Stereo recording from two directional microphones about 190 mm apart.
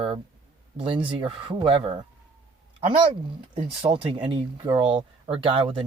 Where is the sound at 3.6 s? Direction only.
35° right (ahead or behind).